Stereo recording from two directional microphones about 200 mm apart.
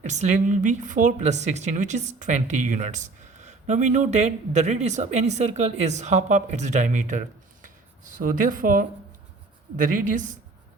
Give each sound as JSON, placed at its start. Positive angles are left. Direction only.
{"t": 0.0, "sound": "a woman's voice", "side_deg": -35}